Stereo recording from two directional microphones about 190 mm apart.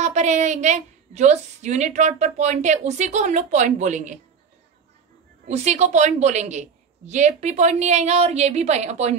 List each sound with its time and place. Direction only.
0.0 s a woman's voice: 40° right (ahead or behind)
5.5 s a woman's voice: 35° right (ahead or behind)